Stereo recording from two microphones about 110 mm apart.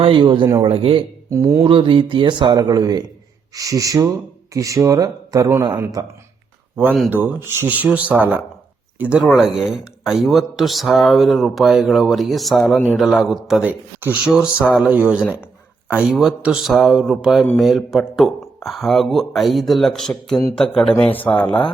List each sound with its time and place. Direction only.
0.0 s speech: 45° right (ahead or behind)
0.6 s speech: 55° right (ahead or behind)
1.3 s speech: 25° right (ahead or behind)
1.6 s speech: 50° right (ahead or behind); by 6.1 s 35° right (ahead or behind)
7.1 s speech: 15° right (ahead or behind); by 12.7 s centre (ahead or behind)
12.7 s a man's voice: 20° left (ahead or behind)
13.0 s speech: centre (ahead or behind)
13.6 s a man's voice: 15° right (ahead or behind); by 21.4 s 15° left (ahead or behind)